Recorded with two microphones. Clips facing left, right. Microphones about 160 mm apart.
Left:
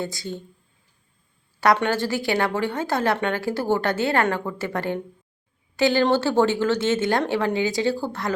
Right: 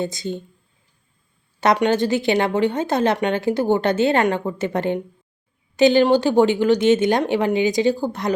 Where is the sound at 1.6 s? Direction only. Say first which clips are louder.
Right 3 dB; 20° right (ahead or behind).